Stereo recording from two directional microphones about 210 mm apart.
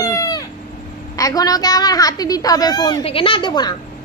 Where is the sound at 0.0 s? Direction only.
15° left (ahead or behind).